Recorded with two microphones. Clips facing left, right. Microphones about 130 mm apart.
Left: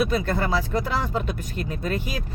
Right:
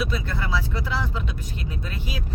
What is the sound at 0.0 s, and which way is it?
Speech, 50° left (ahead or behind).